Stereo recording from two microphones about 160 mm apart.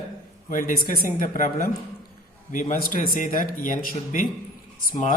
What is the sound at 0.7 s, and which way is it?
A man's voice, 65° left (ahead or behind).